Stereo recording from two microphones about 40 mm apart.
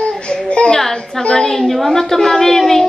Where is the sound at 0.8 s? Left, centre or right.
Centre.